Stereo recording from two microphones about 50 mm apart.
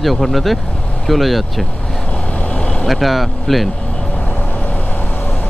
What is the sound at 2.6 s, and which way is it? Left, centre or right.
Vehicle, left.